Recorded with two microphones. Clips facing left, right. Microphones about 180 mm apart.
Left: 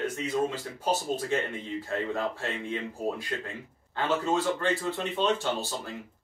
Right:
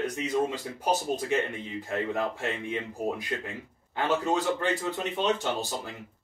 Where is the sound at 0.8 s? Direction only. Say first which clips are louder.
Right 1 dB; 15° right (ahead or behind).